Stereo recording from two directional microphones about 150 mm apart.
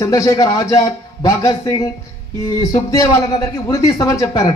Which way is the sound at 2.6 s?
25° left (ahead or behind).